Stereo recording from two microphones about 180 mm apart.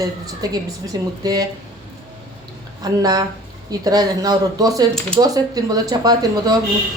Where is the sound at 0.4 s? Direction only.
20° right (ahead or behind).